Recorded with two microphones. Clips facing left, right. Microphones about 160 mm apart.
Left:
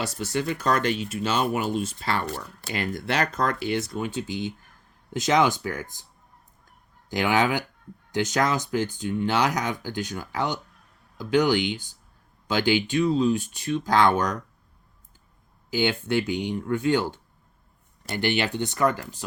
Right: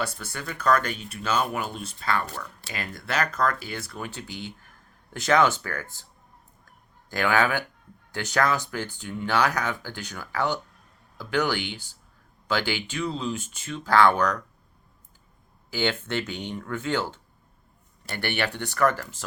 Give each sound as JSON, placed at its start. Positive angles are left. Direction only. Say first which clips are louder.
{"t": 0.3, "sound": "speech", "louder": "even", "side_deg": 25}
{"t": 7.1, "sound": "speech", "louder": "left 1 dB", "side_deg": 15}
{"t": 15.7, "sound": "speech", "louder": "left 3 dB", "side_deg": 15}